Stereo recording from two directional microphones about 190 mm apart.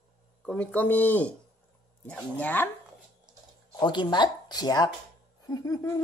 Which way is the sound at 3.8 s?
25° left (ahead or behind).